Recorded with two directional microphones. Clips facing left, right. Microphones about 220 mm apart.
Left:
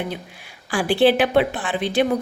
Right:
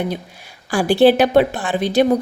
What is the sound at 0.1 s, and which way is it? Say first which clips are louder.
A woman's voice: right 5 dB; 40° right (ahead or behind).